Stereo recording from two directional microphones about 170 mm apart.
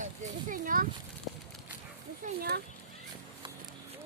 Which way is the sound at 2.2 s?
50° right (ahead or behind).